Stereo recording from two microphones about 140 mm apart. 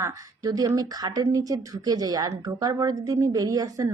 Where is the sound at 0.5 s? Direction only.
25° right (ahead or behind).